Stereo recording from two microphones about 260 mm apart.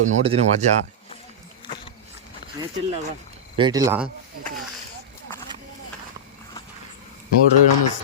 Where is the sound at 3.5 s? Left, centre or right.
Centre.